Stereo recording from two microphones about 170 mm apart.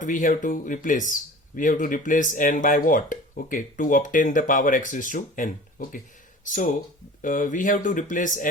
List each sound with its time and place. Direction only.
0.0 s speech: 50° left (ahead or behind)
6.5 s speech: 50° left (ahead or behind)